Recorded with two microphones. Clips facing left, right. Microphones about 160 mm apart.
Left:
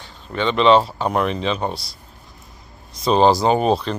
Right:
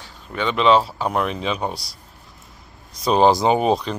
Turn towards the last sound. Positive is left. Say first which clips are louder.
# left 1 dB
turn(degrees=-10)  # may be behind; listen again after turning